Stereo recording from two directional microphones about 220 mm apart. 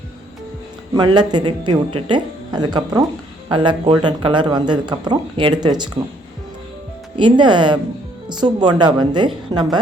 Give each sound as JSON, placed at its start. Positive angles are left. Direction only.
{"t": 0.9, "sound": "speech", "side_deg": -20}
{"t": 7.2, "sound": "speech", "side_deg": -20}